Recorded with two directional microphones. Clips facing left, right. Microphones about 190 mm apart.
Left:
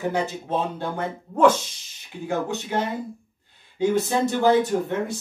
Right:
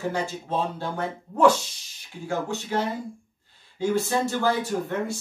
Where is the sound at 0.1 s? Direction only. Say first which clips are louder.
Left 3 dB; 15° left (ahead or behind).